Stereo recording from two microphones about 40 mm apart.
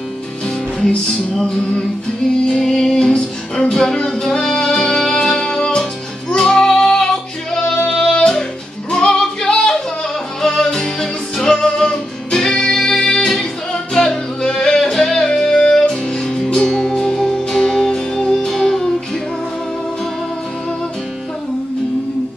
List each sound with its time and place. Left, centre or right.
0.8 s music: centre
9.0 s music: centre